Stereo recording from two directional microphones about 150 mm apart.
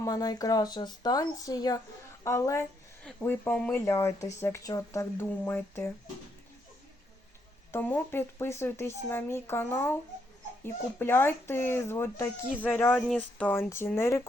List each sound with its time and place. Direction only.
0.0 s speech: 25° left (ahead or behind)
3.0 s speech: 10° left (ahead or behind)
7.7 s speech: 15° left (ahead or behind)
11.0 s speech: 15° left (ahead or behind)